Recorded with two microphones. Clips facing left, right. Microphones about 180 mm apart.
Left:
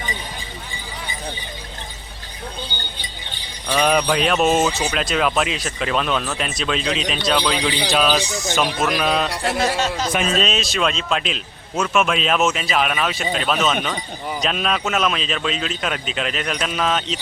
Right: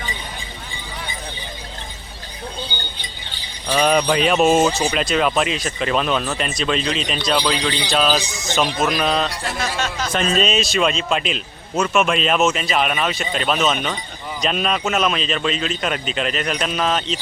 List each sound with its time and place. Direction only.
3.7 s a man's voice: centre (ahead or behind)
9.7 s speech: 35° left (ahead or behind)
10.1 s a man's voice: 5° left (ahead or behind)